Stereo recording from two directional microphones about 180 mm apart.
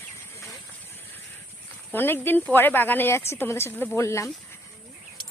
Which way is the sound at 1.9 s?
10° left (ahead or behind).